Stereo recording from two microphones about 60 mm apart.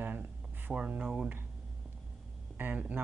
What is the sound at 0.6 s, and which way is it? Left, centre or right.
Speech, right.